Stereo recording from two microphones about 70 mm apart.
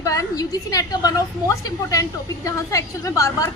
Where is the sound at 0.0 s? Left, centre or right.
Left.